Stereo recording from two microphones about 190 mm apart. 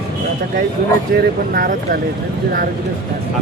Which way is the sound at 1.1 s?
50° right (ahead or behind).